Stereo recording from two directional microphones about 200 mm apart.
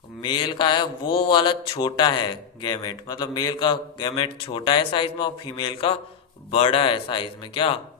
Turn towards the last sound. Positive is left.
turn(degrees=25)  # may be behind; listen again after turning